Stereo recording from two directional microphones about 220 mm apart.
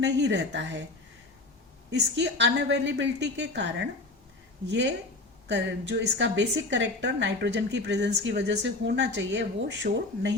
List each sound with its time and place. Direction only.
0.0 s a woman's voice: 55° right (ahead or behind)
1.9 s a woman's voice: 50° right (ahead or behind)